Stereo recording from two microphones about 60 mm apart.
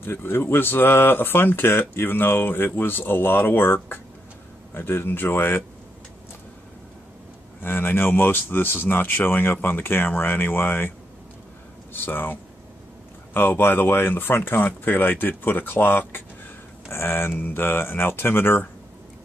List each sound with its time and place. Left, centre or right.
0.0 s speech: left
7.6 s speech: left
11.9 s speech: left